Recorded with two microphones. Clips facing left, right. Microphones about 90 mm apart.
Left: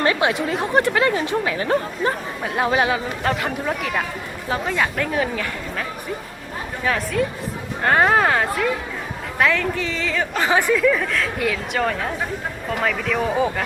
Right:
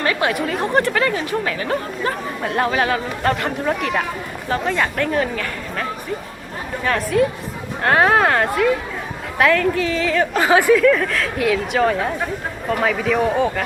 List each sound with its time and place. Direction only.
0.0 s speech: 25° left (ahead or behind)
2.4 s speech: 5° left (ahead or behind)
2.6 s speech: 20° left (ahead or behind)
3.2 s speech: centre (ahead or behind)
10.8 s speech: centre (ahead or behind)